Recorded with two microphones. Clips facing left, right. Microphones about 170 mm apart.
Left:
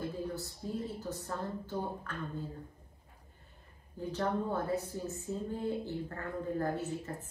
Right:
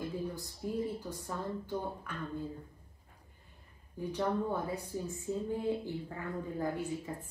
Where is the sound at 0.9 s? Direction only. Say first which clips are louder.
Left 1 dB; 10° right (ahead or behind).